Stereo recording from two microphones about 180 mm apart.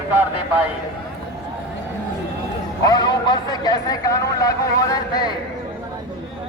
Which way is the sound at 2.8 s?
20° left (ahead or behind).